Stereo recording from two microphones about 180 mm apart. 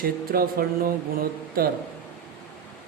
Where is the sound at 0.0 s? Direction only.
55° right (ahead or behind).